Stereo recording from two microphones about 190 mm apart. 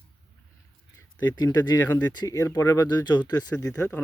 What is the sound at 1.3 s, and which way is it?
Speech, 20° left (ahead or behind).